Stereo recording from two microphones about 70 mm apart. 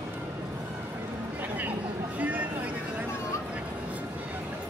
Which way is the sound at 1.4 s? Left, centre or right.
Right.